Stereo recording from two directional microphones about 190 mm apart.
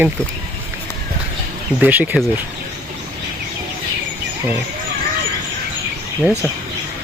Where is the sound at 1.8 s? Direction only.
10° right (ahead or behind).